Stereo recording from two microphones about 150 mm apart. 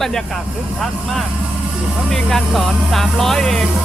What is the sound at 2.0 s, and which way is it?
A man's voice, centre (ahead or behind).